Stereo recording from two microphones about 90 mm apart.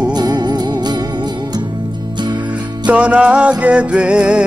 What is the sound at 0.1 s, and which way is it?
Music, 50° right (ahead or behind).